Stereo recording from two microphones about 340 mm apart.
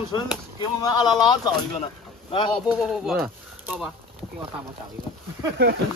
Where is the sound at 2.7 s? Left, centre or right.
Centre.